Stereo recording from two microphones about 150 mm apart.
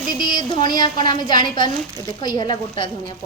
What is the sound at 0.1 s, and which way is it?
A woman's voice, 30° left (ahead or behind).